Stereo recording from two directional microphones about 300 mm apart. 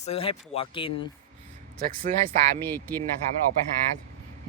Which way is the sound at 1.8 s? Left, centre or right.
Right.